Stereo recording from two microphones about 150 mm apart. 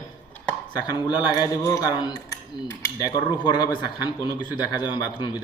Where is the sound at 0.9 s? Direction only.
30° left (ahead or behind).